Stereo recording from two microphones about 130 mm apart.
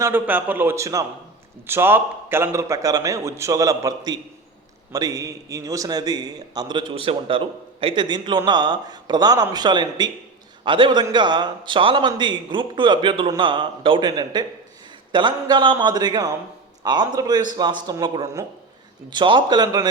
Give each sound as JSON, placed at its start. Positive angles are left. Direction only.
{"t": 0.0, "sound": "a man's voice", "side_deg": -15}